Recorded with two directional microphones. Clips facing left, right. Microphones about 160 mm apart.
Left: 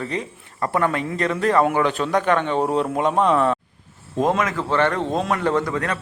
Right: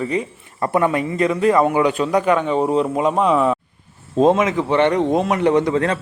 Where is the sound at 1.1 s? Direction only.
5° right (ahead or behind).